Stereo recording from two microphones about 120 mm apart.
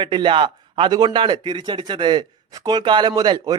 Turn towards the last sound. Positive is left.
turn(degrees=-35)  # may be behind; listen again after turning